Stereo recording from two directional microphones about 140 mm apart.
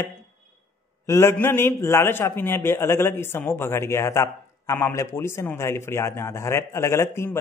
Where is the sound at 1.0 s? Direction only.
20° left (ahead or behind).